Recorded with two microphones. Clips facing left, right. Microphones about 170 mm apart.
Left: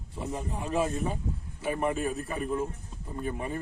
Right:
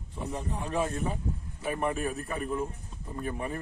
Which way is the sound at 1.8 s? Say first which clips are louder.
Left 1 dB; 30° left (ahead or behind).